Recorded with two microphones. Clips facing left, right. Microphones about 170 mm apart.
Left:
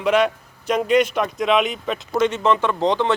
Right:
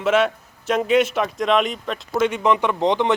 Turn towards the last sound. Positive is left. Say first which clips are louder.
# even
turn(degrees=-20)  # may be behind; listen again after turning